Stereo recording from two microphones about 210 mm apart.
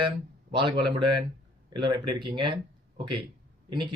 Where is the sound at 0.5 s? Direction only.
25° right (ahead or behind).